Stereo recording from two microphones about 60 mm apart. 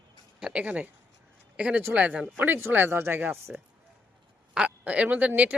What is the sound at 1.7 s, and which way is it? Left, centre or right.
Speech, right.